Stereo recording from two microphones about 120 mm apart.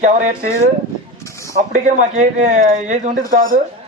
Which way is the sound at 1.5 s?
85° right.